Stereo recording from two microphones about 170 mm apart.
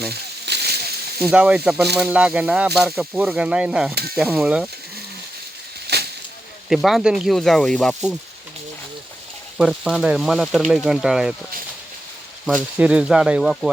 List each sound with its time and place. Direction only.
0.1 s a sound: 75° right (ahead or behind)
1.3 s speech: 5° right (ahead or behind)
5.9 s a sound: 75° right (ahead or behind)
6.7 s speech: centre (ahead or behind)
9.6 s speech: centre (ahead or behind)
12.7 s speech: 5° right (ahead or behind)